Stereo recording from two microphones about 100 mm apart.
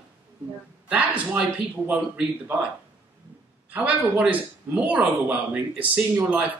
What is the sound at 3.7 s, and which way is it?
Speech, 10° right (ahead or behind).